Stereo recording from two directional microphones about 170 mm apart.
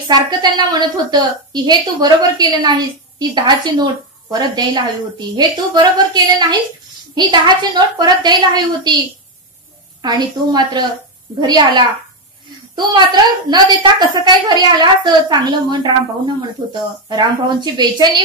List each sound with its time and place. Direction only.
0.1 s a woman's voice: 25° right (ahead or behind)
10.0 s a woman's voice: 25° right (ahead or behind)
17.1 s a woman's voice: 25° right (ahead or behind)